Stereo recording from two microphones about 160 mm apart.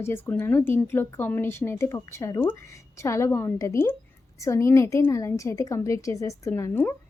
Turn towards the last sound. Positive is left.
turn(degrees=15)  # may be behind; listen again after turning